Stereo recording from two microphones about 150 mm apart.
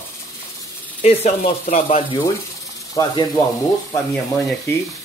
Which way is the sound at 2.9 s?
25° left (ahead or behind).